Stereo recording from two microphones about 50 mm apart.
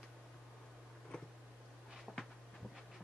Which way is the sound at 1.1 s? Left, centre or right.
Centre.